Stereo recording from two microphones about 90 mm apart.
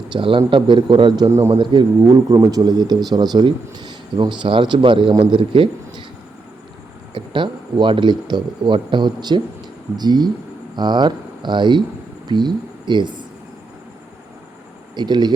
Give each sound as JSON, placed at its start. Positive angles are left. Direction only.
{"t": 0.1, "sound": "speech", "side_deg": -70}
{"t": 1.3, "sound": "a man's voice", "side_deg": -35}
{"t": 1.5, "sound": "speech", "side_deg": -60}
{"t": 7.1, "sound": "speech", "side_deg": -60}
{"t": 14.9, "sound": "speech", "side_deg": -55}